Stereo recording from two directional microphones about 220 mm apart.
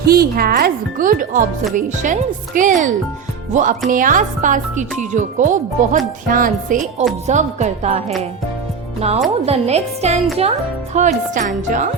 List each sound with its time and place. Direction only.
0.0 s a woman's voice: 45° right (ahead or behind)